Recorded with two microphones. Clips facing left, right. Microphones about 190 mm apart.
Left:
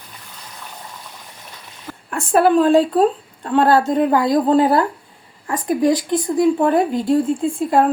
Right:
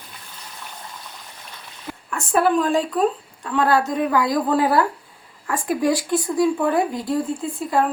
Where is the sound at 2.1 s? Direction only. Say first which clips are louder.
Left 5 dB; 30° left (ahead or behind).